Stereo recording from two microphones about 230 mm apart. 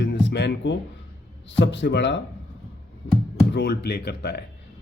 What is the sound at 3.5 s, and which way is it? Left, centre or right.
Speech, left.